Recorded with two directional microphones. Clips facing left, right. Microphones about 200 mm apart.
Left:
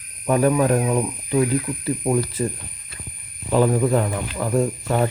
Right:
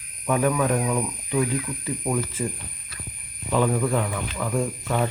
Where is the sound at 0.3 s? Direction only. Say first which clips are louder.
Left 4 dB; 35° left (ahead or behind).